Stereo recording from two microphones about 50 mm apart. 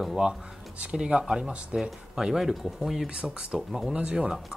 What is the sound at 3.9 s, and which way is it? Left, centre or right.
Speech, right.